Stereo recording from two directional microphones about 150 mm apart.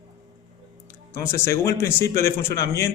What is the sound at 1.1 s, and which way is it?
A man's voice, 15° left (ahead or behind).